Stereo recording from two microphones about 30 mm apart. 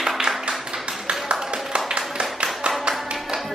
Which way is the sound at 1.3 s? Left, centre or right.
Right.